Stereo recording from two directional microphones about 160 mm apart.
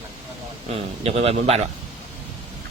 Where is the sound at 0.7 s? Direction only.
40° right (ahead or behind).